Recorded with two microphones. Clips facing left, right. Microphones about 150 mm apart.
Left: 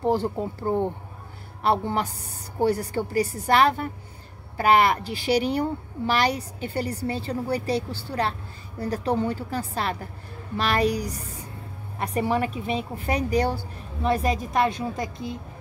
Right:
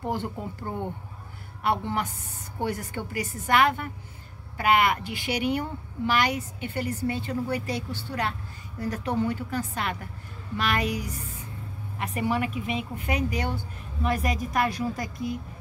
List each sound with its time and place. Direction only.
0.0 s a woman's voice: 35° left (ahead or behind)